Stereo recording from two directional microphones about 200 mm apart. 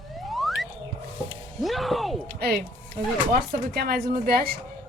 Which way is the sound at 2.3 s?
50° right (ahead or behind).